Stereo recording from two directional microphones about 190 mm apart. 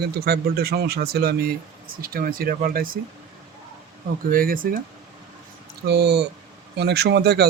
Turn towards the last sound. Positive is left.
turn(degrees=-60)  # may be behind; listen again after turning